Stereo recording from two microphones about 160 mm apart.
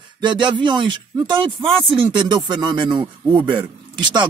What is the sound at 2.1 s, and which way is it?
A man's voice, 30° right (ahead or behind).